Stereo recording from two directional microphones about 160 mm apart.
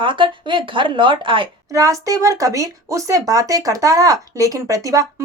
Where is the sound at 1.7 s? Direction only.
20° right (ahead or behind).